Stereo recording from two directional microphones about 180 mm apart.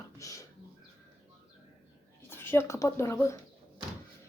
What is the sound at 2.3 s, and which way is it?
Speech, 15° left (ahead or behind).